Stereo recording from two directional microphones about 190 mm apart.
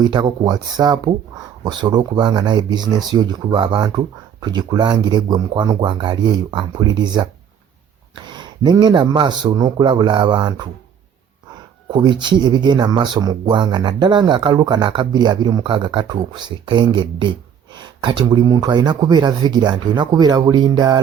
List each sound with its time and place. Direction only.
0.0 s speech: 25° right (ahead or behind)
8.3 s speech: 25° right (ahead or behind)
11.9 s speech: 25° right (ahead or behind)